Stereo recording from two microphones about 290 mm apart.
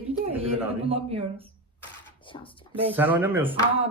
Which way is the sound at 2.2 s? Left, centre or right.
Centre.